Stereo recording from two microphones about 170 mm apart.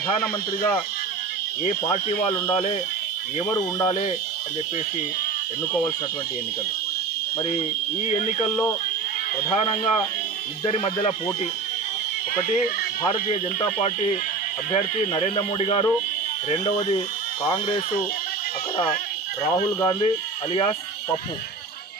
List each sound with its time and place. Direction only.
0.2 s speech: 15° left (ahead or behind)
3.5 s speech: 20° left (ahead or behind)
8.1 s speech: 40° left (ahead or behind)
9.5 s speech: 30° left (ahead or behind)
13.0 s speech: 35° left (ahead or behind)
15.2 s speech: 35° left (ahead or behind)
19.8 s speech: 30° left (ahead or behind)